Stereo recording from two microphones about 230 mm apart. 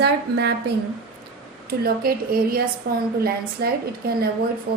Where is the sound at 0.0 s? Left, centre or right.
Right.